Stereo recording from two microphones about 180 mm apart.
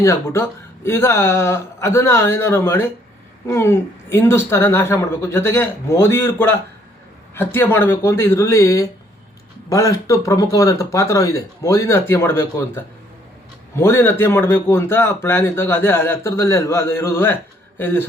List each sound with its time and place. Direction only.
0.0 s a man's voice: 15° left (ahead or behind)